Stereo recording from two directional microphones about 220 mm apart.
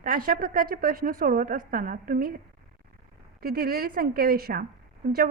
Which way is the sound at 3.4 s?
45° right (ahead or behind).